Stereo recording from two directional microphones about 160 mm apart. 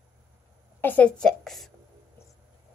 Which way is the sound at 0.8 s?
10° left (ahead or behind).